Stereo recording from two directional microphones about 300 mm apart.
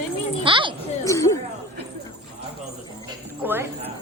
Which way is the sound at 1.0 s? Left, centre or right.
Centre.